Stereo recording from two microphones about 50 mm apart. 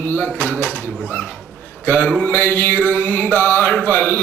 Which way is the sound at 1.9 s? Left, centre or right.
Left.